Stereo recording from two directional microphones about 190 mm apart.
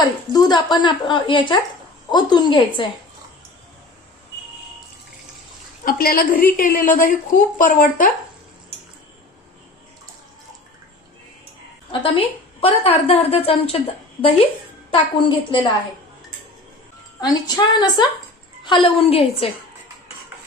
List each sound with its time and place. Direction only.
0.0 s speech: 20° left (ahead or behind)
5.8 s a woman's voice: 50° left (ahead or behind)
11.9 s a woman's voice: 30° left (ahead or behind)
17.2 s speech: 20° left (ahead or behind)